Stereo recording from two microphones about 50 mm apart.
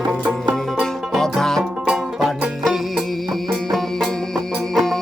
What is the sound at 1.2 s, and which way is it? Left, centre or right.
Music, centre.